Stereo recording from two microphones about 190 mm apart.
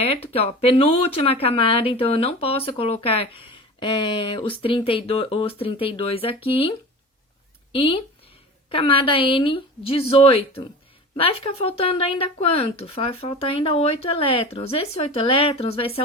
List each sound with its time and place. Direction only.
0.0 s speech: 30° left (ahead or behind)